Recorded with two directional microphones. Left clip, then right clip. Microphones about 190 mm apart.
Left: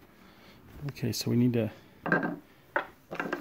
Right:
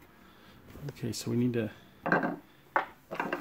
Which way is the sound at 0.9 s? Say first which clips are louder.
Left 3 dB; 45° left (ahead or behind).